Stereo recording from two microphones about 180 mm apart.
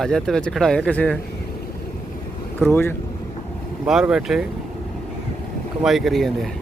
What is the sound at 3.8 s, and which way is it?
Speech, 5° right (ahead or behind).